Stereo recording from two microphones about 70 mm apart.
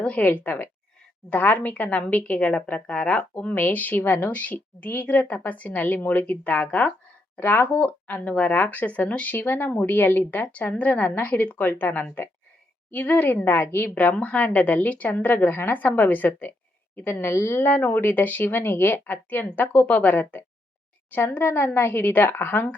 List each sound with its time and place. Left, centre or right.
0.0 s a woman's voice: centre; by 19.9 s left
19.9 s a woman's voice: left
21.1 s a woman's voice: left